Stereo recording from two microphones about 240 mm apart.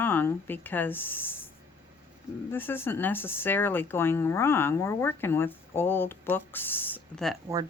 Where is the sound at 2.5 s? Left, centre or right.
Centre.